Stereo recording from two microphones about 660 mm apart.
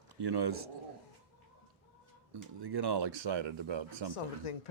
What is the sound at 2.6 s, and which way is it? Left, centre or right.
Speech, right.